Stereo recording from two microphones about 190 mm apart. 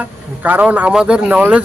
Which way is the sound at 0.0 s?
10° right (ahead or behind).